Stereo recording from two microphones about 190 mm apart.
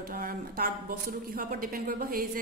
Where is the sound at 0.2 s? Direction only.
50° right (ahead or behind).